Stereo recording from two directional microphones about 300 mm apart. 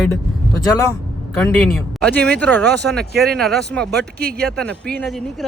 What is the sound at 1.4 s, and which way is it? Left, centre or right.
Speech, centre.